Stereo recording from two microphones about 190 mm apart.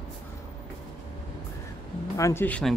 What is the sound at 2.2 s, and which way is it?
Speech, 10° left (ahead or behind).